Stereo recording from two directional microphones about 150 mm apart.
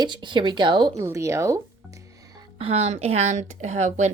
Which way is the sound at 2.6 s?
45° right (ahead or behind).